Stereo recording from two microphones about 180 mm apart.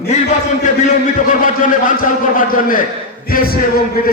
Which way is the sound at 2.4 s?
50° left (ahead or behind).